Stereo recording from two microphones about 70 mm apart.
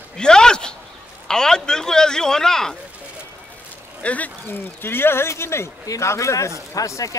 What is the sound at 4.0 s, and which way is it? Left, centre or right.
Speech, left.